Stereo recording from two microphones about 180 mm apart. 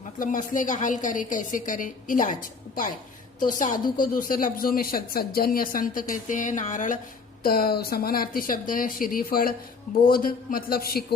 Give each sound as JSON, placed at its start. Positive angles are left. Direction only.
{"t": 0.0, "sound": "speech", "side_deg": 45}
{"t": 7.4, "sound": "speech", "side_deg": 55}